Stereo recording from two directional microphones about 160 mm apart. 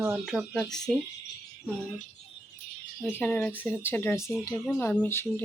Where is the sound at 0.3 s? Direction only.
Centre (ahead or behind).